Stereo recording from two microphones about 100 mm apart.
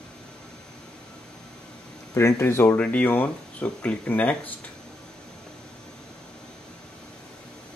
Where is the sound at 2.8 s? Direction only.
15° left (ahead or behind).